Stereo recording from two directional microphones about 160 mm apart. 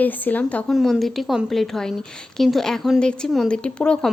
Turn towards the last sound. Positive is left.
turn(degrees=5)  # may be behind; listen again after turning